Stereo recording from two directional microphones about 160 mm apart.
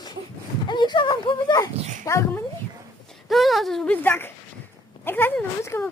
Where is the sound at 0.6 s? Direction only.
30° left (ahead or behind).